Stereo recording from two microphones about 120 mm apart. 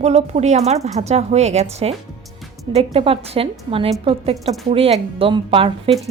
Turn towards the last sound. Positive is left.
turn(degrees=-50)  # may be behind; listen again after turning